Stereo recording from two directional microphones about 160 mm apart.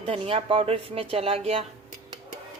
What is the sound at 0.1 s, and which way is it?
Speech, 35° right (ahead or behind).